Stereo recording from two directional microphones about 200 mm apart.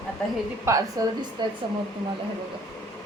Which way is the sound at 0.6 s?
15° right (ahead or behind).